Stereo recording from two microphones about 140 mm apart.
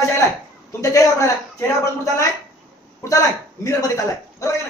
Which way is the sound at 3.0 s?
25° left (ahead or behind).